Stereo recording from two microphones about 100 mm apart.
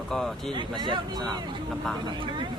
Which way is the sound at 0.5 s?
50° right (ahead or behind).